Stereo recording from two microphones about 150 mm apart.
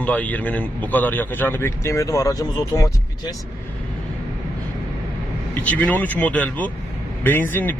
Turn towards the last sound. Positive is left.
turn(degrees=15)  # may be behind; listen again after turning